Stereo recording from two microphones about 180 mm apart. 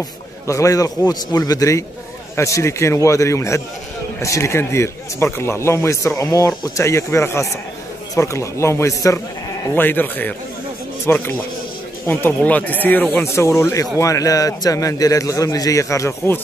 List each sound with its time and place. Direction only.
0.5 s a man's voice: 20° left (ahead or behind)